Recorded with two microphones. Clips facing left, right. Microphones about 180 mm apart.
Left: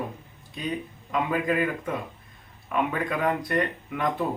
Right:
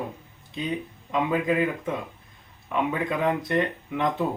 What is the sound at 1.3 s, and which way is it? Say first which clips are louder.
Speech: right 1 dB; 20° right (ahead or behind).